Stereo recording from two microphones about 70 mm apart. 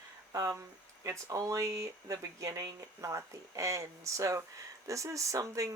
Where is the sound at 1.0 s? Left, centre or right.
Right.